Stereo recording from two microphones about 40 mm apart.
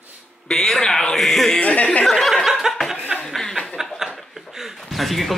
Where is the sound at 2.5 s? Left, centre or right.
Centre.